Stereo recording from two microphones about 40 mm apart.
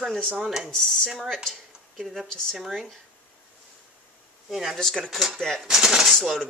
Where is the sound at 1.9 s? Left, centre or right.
Centre.